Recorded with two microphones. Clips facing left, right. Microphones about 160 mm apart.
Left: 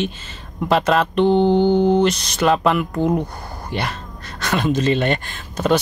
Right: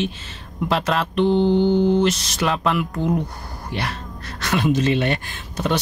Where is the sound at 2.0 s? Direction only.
Centre (ahead or behind).